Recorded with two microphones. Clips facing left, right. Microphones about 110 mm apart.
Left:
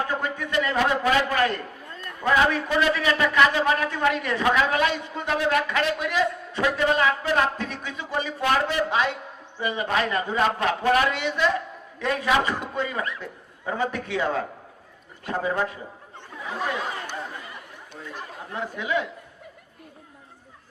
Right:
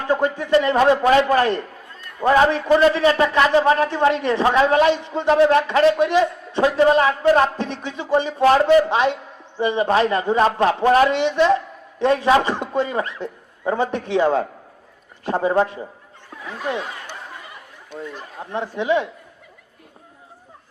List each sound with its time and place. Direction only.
0.1 s a man's voice: 30° right (ahead or behind)
18.5 s a man's voice: 30° right (ahead or behind)